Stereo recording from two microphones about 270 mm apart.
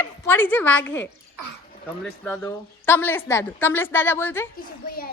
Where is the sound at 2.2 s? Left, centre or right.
Centre.